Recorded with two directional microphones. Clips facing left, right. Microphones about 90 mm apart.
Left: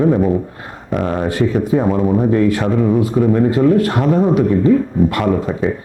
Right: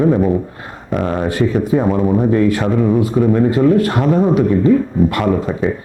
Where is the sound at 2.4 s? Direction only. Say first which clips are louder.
Even; 20° right (ahead or behind).